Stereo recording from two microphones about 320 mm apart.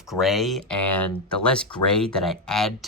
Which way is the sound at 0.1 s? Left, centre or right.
Centre.